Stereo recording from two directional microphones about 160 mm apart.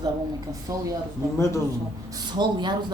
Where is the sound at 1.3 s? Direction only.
15° left (ahead or behind).